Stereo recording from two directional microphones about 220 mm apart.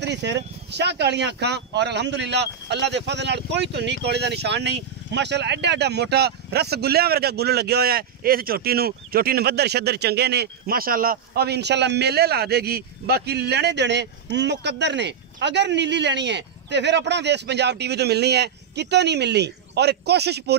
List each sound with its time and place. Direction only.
0.0 s speech: 50° right (ahead or behind)